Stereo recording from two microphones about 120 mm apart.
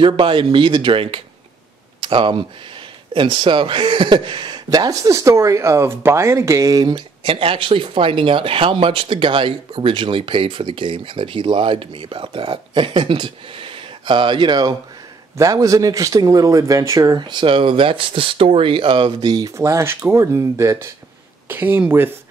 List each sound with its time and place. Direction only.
0.0 s speech: 45° right (ahead or behind)
4.6 s speech: 30° right (ahead or behind)